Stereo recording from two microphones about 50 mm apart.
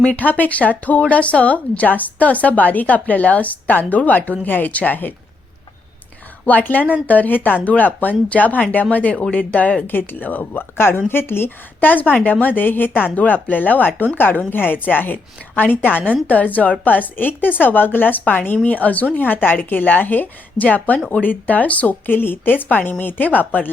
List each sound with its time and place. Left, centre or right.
0.0 s speech: left
6.4 s a woman's voice: left